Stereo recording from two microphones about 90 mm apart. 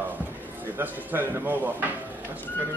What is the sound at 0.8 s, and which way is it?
Speech, 20° right (ahead or behind).